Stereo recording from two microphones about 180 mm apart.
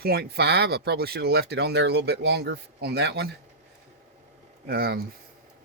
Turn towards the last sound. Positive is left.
turn(degrees=-60)  # may be behind; listen again after turning